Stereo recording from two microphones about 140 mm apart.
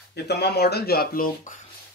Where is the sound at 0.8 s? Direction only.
90° left.